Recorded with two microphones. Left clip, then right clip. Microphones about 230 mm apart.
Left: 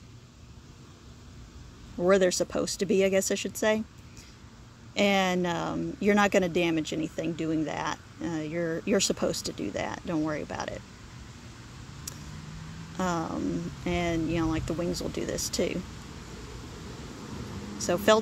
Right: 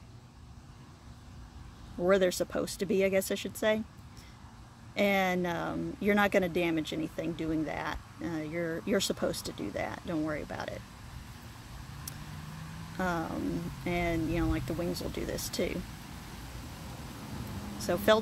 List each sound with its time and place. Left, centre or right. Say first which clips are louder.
2.0 s speech: left 3 dB; centre
4.9 s speech: left 3 dB; centre
12.9 s speech: left 3 dB; centre
17.7 s speech: left 3 dB; centre